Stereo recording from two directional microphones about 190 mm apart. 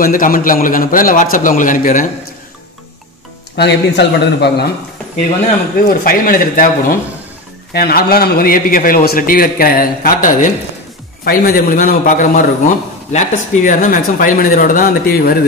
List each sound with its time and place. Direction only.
0.0 s a man's voice: 45° left (ahead or behind)
3.5 s a man's voice: 60° left (ahead or behind)
5.8 s a man's voice: 50° left (ahead or behind)